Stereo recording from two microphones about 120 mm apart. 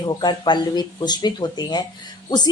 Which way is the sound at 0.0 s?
35° left (ahead or behind).